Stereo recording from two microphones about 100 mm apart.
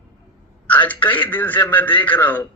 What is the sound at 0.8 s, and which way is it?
Speech, 20° left (ahead or behind).